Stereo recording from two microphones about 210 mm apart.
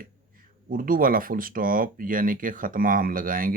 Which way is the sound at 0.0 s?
40° right (ahead or behind).